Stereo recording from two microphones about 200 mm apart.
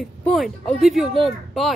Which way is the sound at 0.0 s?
Centre (ahead or behind).